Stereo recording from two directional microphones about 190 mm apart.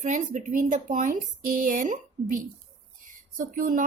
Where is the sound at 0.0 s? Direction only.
40° right (ahead or behind).